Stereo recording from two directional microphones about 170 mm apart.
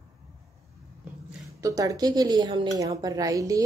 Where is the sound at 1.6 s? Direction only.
20° right (ahead or behind).